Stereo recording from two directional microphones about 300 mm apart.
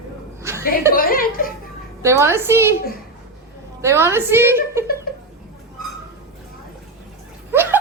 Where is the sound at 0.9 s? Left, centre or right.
Left.